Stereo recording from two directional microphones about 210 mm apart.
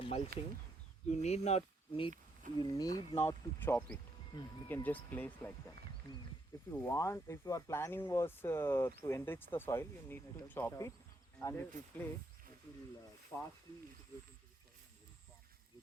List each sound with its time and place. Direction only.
0.3 s speech: 45° right (ahead or behind)
1.1 s speech: 30° left (ahead or behind)
2.6 s speech: 15° left (ahead or behind)
4.3 s speech: 20° left (ahead or behind)
4.7 s speech: 10° left (ahead or behind)
6.8 s speech: 15° left (ahead or behind)
13.3 s speech: centre (ahead or behind)